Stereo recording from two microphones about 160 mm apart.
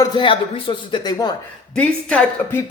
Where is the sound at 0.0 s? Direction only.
30° left (ahead or behind).